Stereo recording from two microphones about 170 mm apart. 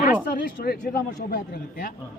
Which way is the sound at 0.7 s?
65° left (ahead or behind).